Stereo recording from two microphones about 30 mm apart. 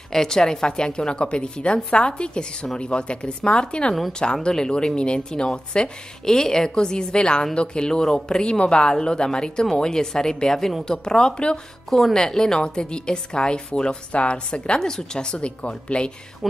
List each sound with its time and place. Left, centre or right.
0.1 s a woman's voice: centre; by 5.9 s left
6.2 s a woman's voice: centre; by 7.9 s left
7.9 s speech: centre
8.4 s a woman's voice: left
14.8 s a woman's voice: left